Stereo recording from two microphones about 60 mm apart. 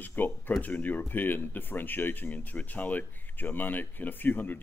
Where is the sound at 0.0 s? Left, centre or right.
Left.